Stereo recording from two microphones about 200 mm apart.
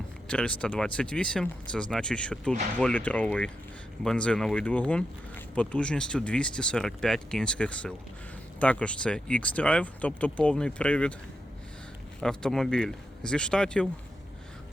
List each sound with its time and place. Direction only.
0.3 s speech: 5° left (ahead or behind)
12.2 s speech: 5° left (ahead or behind)